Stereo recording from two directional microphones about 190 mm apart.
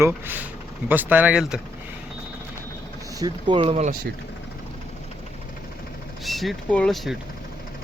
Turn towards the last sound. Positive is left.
turn(degrees=0)  # may be behind; listen again after turning